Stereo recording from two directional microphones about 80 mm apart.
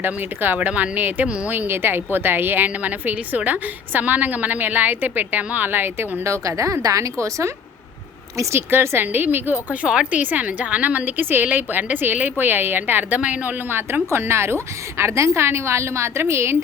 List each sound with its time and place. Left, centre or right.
0.0 s a woman's voice: right
6.2 s a woman's voice: right
9.8 s a woman's voice: centre; by 16.6 s right